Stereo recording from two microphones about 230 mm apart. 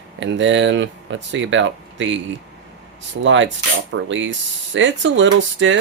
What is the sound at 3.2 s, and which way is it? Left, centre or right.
Speech, right.